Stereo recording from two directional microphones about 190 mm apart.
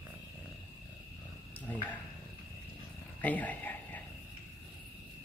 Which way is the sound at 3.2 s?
10° left (ahead or behind).